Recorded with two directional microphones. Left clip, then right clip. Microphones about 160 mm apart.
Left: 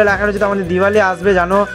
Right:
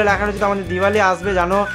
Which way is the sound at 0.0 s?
30° left (ahead or behind).